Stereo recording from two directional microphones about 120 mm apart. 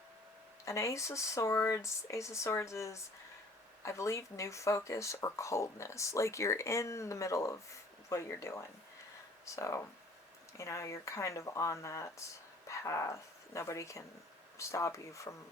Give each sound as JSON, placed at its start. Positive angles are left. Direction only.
{"t": 0.6, "sound": "speech", "side_deg": 25}